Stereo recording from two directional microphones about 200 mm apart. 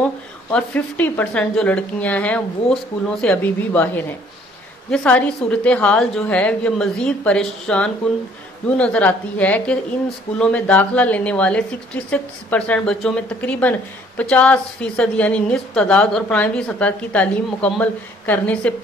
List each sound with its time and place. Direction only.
0.5 s a woman's voice: 5° left (ahead or behind)